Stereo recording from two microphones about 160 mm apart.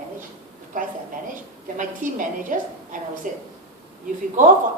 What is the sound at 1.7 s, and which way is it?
A woman's voice, 55° right (ahead or behind).